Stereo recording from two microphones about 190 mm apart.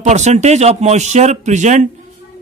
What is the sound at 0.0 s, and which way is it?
A man's voice, 40° right (ahead or behind).